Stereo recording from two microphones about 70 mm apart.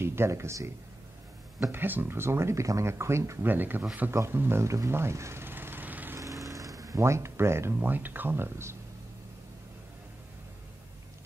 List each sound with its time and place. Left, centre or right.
0.0 s speech: right
1.7 s speech: right
3.4 s speech: right
4.8 s a sound: right
6.1 s vehicle: right
7.0 s speech: right
7.9 s speech: right